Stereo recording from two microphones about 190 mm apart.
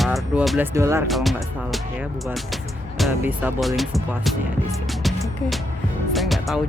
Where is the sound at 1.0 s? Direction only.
Centre (ahead or behind).